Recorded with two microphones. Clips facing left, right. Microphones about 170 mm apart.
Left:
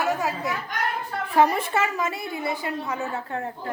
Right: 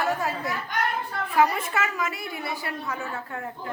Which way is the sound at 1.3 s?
30° left (ahead or behind).